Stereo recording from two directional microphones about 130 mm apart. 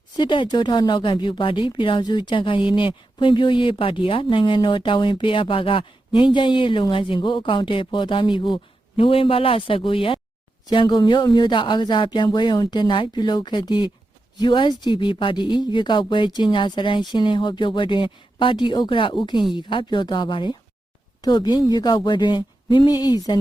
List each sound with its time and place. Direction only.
0.2 s speech: 35° left (ahead or behind)